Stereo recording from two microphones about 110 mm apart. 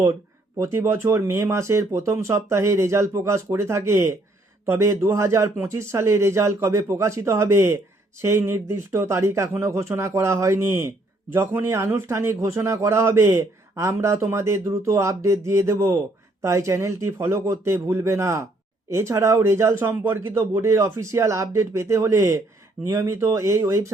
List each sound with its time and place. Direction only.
0.9 s speech: 25° right (ahead or behind)